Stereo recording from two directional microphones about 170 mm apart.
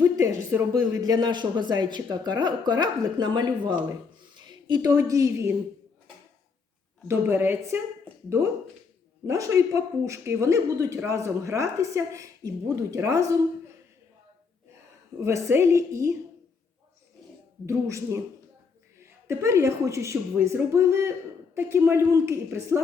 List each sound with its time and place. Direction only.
0.2 s a woman's voice: 20° right (ahead or behind)
7.1 s speech: 15° right (ahead or behind)
9.2 s speech: 15° right (ahead or behind)
15.2 s speech: 15° right (ahead or behind)
17.7 s speech: 15° right (ahead or behind)